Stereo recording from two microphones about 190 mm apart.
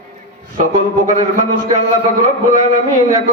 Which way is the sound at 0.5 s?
40° right (ahead or behind).